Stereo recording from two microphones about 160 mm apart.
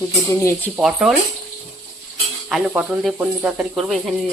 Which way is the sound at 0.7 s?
5° right (ahead or behind).